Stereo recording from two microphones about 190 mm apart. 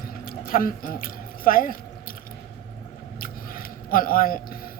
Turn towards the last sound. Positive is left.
turn(degrees=50)  # may be behind; listen again after turning